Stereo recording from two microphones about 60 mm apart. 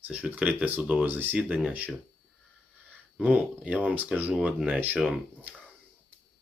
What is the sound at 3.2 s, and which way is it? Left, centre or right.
Speech, right.